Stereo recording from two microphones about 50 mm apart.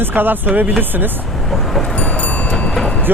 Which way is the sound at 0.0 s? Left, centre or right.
Right.